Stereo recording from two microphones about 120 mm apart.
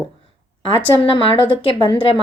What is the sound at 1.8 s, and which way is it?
Speech, 45° left (ahead or behind).